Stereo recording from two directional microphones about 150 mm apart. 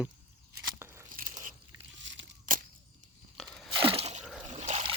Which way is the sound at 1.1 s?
65° right (ahead or behind).